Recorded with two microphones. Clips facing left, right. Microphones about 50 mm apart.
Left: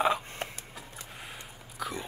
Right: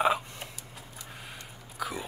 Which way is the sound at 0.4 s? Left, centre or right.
Left.